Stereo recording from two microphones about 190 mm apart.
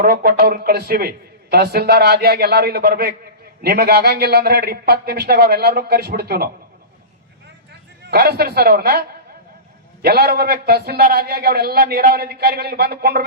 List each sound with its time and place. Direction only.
0.0 s a man's voice: 50° right (ahead or behind)
8.0 s a man's voice: 55° right (ahead or behind)